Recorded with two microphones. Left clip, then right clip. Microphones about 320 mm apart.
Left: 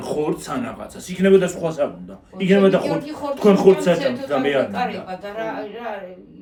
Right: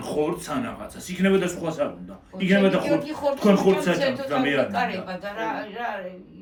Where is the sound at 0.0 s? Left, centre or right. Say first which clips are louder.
Left 3 dB; centre.